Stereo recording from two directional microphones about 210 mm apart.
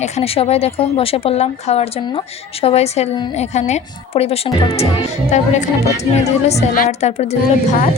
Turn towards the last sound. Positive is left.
turn(degrees=35)  # may be behind; listen again after turning